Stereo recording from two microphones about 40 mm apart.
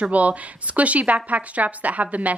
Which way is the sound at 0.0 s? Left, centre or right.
Right.